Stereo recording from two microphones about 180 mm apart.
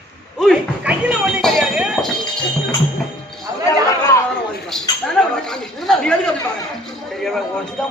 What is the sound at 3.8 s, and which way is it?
Chatter, 15° left (ahead or behind).